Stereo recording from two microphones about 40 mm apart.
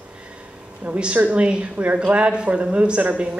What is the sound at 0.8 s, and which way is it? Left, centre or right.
A woman's voice, right.